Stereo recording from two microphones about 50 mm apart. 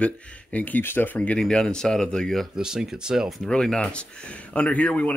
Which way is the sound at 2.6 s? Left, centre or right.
Centre.